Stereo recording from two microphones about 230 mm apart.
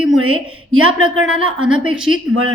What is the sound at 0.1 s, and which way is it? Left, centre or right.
A woman's voice, right.